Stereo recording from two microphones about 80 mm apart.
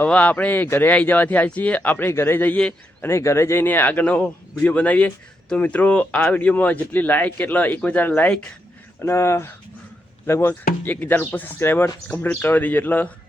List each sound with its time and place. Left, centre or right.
0.0 s speech: centre
3.0 s speech: left
9.0 s speech: left
10.8 s speech: left